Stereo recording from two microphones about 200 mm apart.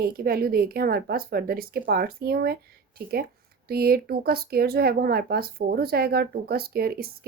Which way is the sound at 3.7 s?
50° right (ahead or behind).